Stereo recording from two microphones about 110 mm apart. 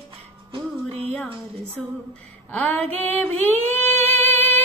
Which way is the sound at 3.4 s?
15° left (ahead or behind).